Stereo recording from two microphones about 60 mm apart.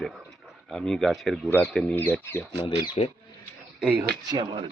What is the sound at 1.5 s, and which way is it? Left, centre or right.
Speech, left.